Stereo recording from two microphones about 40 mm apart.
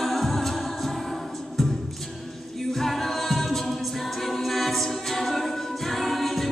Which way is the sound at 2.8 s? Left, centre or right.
Centre.